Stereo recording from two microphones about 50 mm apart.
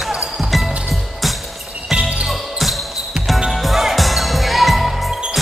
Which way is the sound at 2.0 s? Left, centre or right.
Right.